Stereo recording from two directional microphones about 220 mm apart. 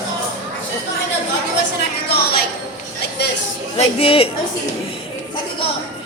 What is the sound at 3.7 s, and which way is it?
Speech, 25° left (ahead or behind).